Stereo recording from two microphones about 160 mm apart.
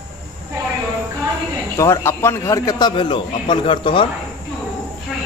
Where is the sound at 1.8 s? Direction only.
15° left (ahead or behind).